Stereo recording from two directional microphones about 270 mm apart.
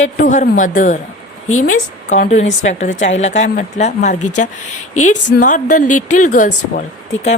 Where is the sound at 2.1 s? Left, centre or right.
Left.